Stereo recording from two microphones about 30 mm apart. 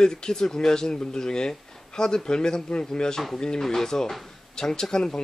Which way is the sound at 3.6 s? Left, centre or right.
Centre.